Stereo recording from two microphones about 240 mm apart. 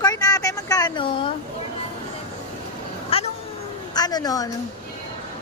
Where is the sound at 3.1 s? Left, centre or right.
Left.